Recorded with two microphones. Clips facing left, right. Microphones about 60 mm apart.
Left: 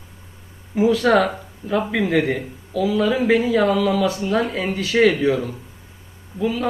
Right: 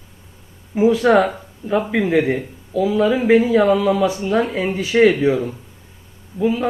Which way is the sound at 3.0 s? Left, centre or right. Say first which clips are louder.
Right 4 dB; centre.